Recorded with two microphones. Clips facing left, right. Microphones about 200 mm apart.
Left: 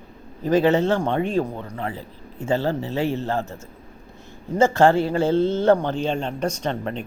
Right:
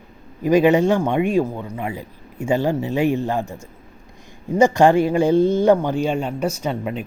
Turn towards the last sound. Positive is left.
turn(degrees=-10)  # may be behind; listen again after turning